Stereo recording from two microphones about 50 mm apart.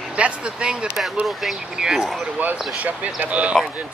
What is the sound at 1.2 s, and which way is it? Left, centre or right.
Speech, centre.